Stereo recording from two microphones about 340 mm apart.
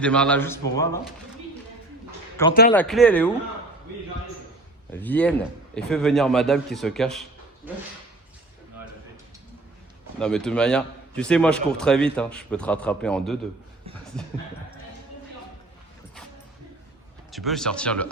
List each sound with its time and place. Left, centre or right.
0.0 s a man's voice: centre
2.4 s a man's voice: centre
4.9 s a man's voice: centre
10.2 s a man's voice: centre
17.3 s a man's voice: centre